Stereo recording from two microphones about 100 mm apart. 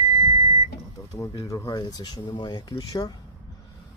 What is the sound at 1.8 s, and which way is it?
Speech, 45° left (ahead or behind).